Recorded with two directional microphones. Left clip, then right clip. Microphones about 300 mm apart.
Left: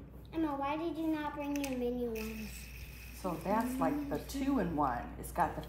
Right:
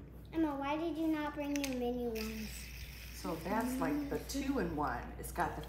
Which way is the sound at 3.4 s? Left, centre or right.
Left.